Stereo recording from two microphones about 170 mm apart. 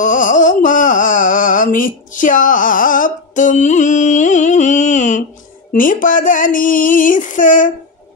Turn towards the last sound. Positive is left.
turn(degrees=50)  # may be behind; listen again after turning